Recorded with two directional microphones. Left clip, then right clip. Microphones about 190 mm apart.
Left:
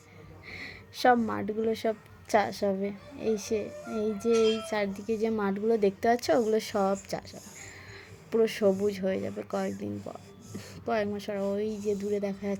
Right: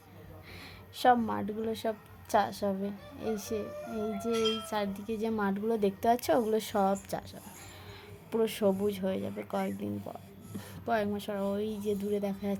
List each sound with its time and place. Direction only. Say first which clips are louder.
0.5 s a woman's voice: left 6 dB; 20° left (ahead or behind)
8.3 s a woman's voice: left 4 dB; 10° left (ahead or behind)